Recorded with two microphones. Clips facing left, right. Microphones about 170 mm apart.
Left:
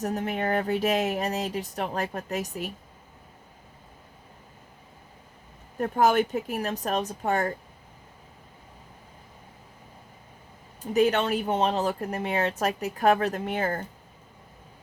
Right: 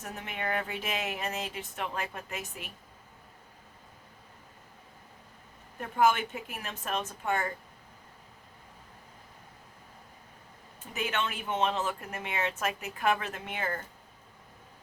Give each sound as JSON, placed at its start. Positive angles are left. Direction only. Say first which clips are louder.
{"t": 0.0, "sound": "speech", "louder": "left 9 dB", "side_deg": 40}
{"t": 5.8, "sound": "speech", "louder": "left 5 dB", "side_deg": 40}
{"t": 10.9, "sound": "speech", "louder": "left 11 dB", "side_deg": 40}